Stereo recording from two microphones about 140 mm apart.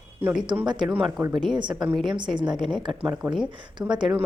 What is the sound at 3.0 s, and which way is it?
Speech, 10° right (ahead or behind).